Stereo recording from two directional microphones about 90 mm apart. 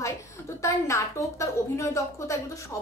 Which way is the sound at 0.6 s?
35° left (ahead or behind).